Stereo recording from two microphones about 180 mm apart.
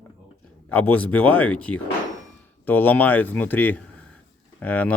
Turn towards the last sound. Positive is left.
turn(degrees=10)  # may be behind; listen again after turning